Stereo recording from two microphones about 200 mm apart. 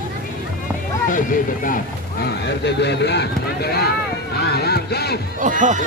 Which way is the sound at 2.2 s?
60° left (ahead or behind).